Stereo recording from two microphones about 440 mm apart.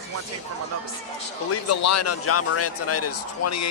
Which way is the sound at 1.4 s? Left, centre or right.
Left.